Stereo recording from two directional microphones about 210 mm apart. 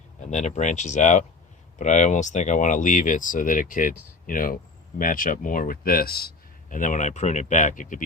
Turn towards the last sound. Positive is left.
turn(degrees=35)  # may be behind; listen again after turning